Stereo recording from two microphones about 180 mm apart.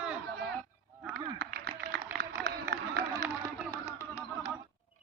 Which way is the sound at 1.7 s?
20° right (ahead or behind).